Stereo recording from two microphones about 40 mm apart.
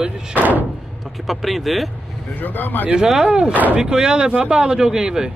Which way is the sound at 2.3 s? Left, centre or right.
Left.